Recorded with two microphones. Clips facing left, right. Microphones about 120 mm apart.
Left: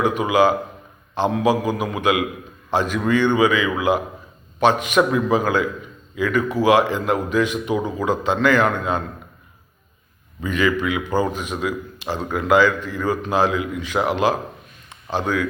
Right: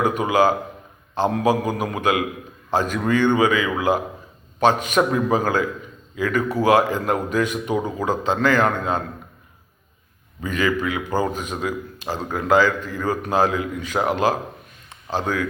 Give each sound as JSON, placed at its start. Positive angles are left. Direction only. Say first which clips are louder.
{"t": 0.0, "sound": "a man's voice", "louder": "left 1 dB", "side_deg": -45}
{"t": 10.4, "sound": "a man's voice", "louder": "left 2 dB", "side_deg": -40}